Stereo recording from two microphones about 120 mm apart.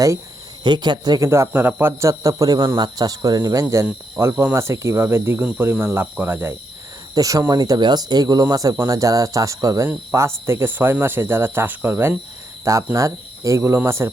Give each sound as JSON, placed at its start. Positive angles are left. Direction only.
{"t": 0.6, "sound": "speech", "side_deg": -40}
{"t": 1.3, "sound": "speech", "side_deg": -20}
{"t": 7.1, "sound": "speech", "side_deg": -30}